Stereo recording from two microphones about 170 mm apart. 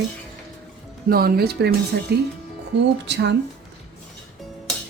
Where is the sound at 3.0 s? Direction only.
90° right.